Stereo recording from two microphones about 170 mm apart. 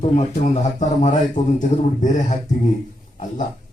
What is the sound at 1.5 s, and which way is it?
Speech, 45° left (ahead or behind).